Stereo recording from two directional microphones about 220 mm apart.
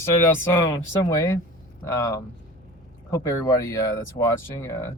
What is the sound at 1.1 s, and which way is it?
Speech, 15° left (ahead or behind).